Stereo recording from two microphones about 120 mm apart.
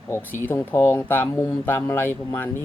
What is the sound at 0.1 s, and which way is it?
Speech, 15° left (ahead or behind).